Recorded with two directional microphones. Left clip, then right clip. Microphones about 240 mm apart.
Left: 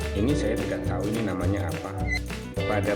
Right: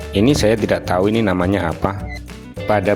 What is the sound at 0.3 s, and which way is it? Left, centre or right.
Speech, right.